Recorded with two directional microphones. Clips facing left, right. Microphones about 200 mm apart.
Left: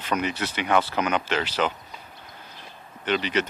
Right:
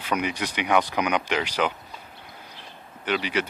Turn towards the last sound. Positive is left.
turn(degrees=-10)  # may be behind; listen again after turning